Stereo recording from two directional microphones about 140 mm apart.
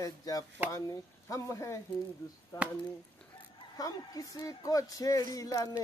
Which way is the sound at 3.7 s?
25° left (ahead or behind).